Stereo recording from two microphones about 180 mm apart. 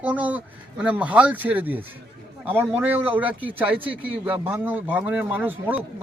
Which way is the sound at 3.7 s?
30° right (ahead or behind).